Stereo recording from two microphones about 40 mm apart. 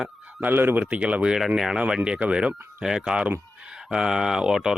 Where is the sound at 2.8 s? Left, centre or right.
Centre.